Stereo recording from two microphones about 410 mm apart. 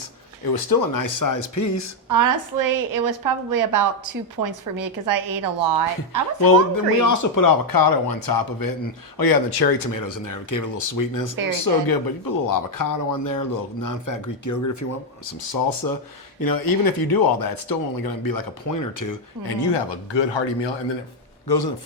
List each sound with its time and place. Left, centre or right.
0.5 s a man's voice: left
2.0 s a woman's voice: right
7.0 s a man's voice: left
15.9 s speech: left
19.6 s speech: left
21.4 s a man's voice: left